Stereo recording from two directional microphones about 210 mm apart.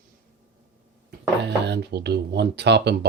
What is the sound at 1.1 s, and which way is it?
Speech, 50° right (ahead or behind).